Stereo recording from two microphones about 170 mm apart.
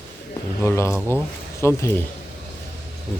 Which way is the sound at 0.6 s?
15° left (ahead or behind).